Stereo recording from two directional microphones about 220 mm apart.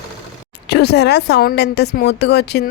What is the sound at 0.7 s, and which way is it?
Speech, 50° left (ahead or behind).